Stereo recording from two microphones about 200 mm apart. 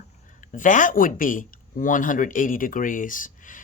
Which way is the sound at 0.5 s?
40° left (ahead or behind).